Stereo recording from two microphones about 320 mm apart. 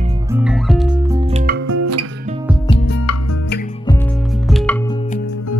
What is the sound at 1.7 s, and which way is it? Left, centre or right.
Music, right.